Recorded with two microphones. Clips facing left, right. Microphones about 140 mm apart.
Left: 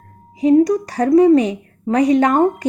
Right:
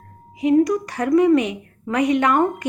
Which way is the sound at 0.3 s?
35° left (ahead or behind).